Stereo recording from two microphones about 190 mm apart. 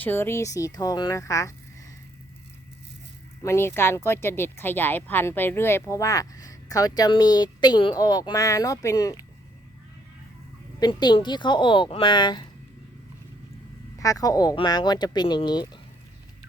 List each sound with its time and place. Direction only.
0.0 s speech: 10° left (ahead or behind)
3.4 s speech: 15° left (ahead or behind)
10.8 s speech: 20° left (ahead or behind)
14.0 s speech: 20° left (ahead or behind)